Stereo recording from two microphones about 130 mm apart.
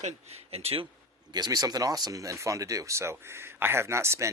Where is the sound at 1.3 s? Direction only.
30° right (ahead or behind).